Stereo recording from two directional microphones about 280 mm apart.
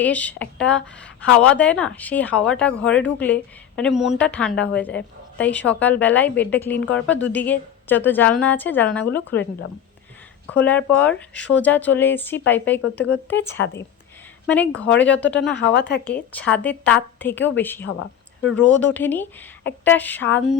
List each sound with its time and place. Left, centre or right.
0.0 s speech: centre
10.5 s speech: centre
13.6 s a woman's voice: left
14.4 s speech: centre
15.5 s a woman's voice: left
16.0 s speech: centre